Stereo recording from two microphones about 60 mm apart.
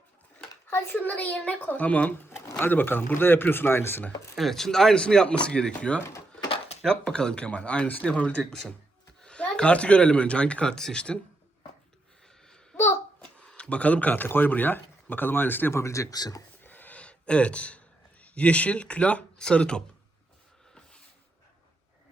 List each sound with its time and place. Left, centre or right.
0.9 s a child's voice: left
4.4 s a child's voice: centre
13.3 s speech: centre; by 15.7 s left
15.7 s speech: left
16.6 s a sound: left
17.0 s speech: centre